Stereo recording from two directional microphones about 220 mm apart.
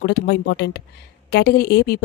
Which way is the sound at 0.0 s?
50° left (ahead or behind).